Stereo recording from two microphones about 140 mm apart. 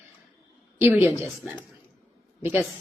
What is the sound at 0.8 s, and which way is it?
Speech, 15° right (ahead or behind).